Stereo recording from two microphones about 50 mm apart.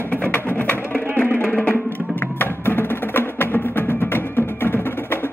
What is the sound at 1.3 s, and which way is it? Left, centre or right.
Music, left.